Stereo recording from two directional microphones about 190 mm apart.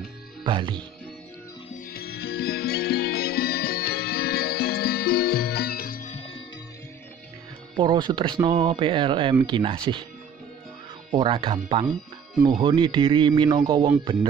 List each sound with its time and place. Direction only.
0.4 s speech: 25° right (ahead or behind)
1.9 s music: 55° left (ahead or behind); by 6.3 s 35° left (ahead or behind)
7.7 s speech: 25° right (ahead or behind)
11.1 s speech: 25° right (ahead or behind)